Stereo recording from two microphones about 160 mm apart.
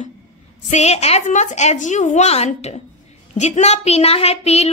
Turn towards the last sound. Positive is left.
turn(degrees=40)  # may be behind; listen again after turning